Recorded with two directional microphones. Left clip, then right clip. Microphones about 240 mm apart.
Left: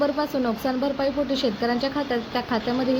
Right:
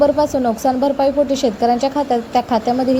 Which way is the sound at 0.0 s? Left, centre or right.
Centre.